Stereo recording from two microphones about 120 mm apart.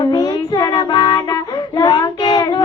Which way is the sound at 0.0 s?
35° left (ahead or behind).